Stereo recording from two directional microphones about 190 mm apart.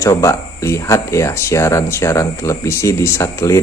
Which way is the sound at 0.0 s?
15° left (ahead or behind).